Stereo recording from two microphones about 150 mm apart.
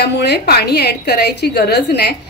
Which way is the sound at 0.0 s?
90° left.